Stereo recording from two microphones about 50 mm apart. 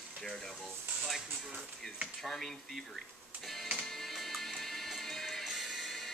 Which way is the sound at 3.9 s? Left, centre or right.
Centre.